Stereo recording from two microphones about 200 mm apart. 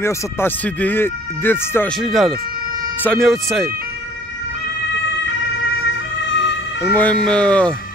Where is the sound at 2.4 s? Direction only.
50° right (ahead or behind).